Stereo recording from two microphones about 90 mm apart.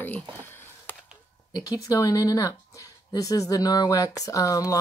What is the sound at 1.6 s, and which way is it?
Speech, 40° left (ahead or behind).